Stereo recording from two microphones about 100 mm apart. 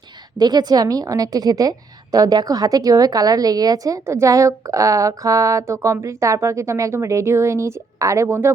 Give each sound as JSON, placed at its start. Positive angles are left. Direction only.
{"t": 0.3, "sound": "a woman's voice", "side_deg": -45}